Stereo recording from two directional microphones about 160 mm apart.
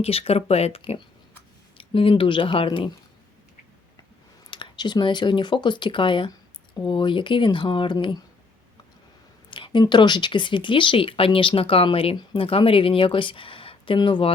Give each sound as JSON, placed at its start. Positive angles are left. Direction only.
{"t": 0.0, "sound": "speech", "side_deg": 40}
{"t": 1.8, "sound": "speech", "side_deg": 35}
{"t": 4.5, "sound": "speech", "side_deg": 30}
{"t": 9.5, "sound": "speech", "side_deg": 30}